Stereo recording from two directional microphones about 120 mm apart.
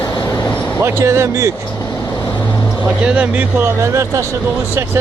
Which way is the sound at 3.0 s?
10° right (ahead or behind).